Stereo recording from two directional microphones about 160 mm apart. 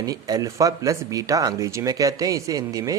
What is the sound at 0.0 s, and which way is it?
A man's voice, 25° right (ahead or behind).